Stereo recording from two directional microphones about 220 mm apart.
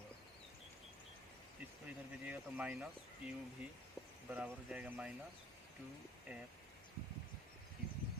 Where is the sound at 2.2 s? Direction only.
5° right (ahead or behind).